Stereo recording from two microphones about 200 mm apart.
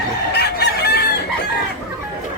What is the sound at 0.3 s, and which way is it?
Chicken, 55° left (ahead or behind).